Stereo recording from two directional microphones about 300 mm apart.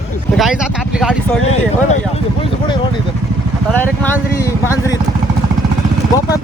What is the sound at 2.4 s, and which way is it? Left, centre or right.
Speech, centre.